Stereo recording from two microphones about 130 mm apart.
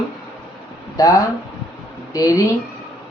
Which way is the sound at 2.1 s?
30° left (ahead or behind).